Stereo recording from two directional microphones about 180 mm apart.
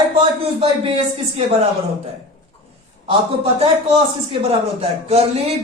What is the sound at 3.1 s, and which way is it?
A man's voice, 35° right (ahead or behind).